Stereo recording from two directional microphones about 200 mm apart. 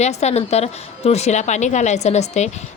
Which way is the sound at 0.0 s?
35° left (ahead or behind).